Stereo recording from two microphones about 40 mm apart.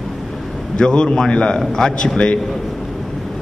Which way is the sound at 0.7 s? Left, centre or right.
Left.